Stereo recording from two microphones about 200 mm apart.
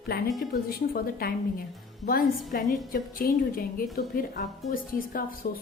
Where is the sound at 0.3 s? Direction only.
50° left (ahead or behind).